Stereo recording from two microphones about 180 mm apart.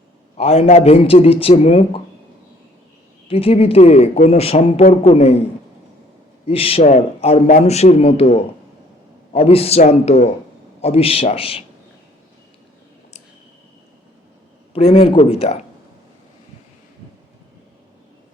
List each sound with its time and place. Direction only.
0.3 s speech: 35° left (ahead or behind)
3.2 s speech: 30° left (ahead or behind)
6.4 s speech: 30° left (ahead or behind)
14.7 s speech: 30° left (ahead or behind)